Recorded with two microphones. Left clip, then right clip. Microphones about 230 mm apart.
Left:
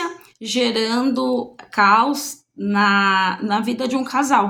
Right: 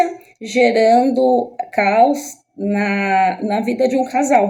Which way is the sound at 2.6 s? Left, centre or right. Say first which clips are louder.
Left 3 dB; left.